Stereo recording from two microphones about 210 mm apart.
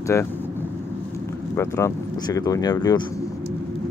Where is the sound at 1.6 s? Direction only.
15° left (ahead or behind).